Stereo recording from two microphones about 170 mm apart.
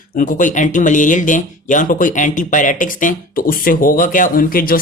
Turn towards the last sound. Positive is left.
turn(degrees=55)  # may be behind; listen again after turning